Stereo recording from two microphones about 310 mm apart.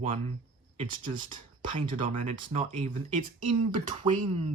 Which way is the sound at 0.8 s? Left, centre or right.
Right.